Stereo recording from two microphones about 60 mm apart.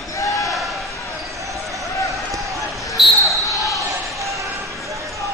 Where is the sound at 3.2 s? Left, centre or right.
Left.